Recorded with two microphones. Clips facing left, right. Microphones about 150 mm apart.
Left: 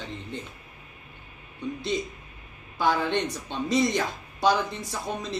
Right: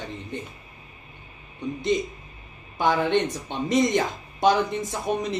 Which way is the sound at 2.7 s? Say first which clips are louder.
Right 3 dB; 20° right (ahead or behind).